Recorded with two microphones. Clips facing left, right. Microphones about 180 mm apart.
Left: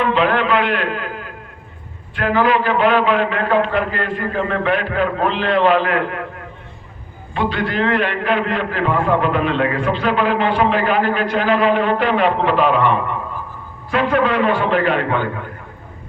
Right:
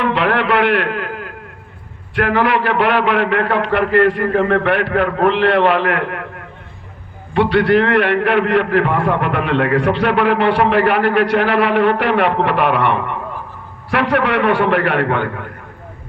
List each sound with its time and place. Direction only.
0.3 s a man's voice: 70° right (ahead or behind)
2.1 s a man's voice: 70° right (ahead or behind)
7.3 s a man's voice: 70° right (ahead or behind)